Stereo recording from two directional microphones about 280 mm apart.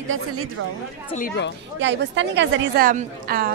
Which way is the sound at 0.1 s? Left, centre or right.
Right.